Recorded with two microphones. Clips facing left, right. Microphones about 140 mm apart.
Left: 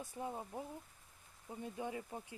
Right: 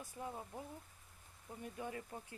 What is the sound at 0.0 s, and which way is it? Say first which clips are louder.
Speech: left 3 dB; 20° left (ahead or behind).